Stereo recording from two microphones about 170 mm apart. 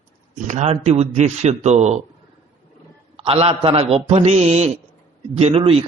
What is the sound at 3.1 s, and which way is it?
A man's voice, 35° right (ahead or behind).